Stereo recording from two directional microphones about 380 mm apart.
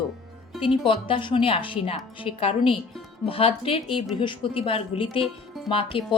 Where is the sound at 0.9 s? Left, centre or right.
Centre.